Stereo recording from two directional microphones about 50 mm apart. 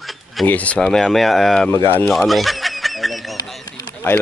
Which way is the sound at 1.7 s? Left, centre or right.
Left.